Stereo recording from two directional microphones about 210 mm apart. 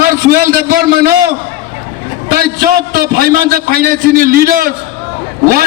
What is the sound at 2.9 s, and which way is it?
A man's voice, 45° right (ahead or behind).